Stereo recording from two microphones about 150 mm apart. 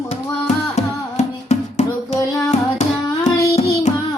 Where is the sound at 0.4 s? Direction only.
50° left (ahead or behind).